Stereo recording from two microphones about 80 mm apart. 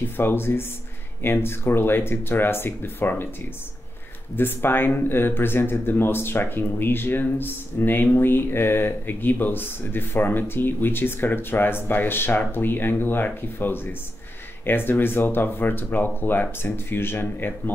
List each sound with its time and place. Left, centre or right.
0.0 s speech: left
4.4 s speech: left